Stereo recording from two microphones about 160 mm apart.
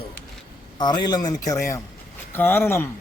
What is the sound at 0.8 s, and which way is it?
Speech, 25° left (ahead or behind).